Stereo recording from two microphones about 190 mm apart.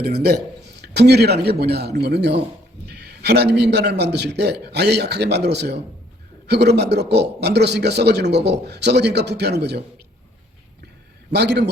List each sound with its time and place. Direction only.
0.0 s a man's voice: 55° right (ahead or behind)
11.3 s a man's voice: 60° right (ahead or behind)